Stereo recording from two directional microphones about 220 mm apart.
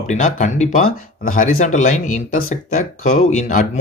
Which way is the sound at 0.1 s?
35° left (ahead or behind).